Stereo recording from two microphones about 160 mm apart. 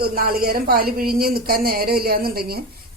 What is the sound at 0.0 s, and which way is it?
Speech, 70° right (ahead or behind).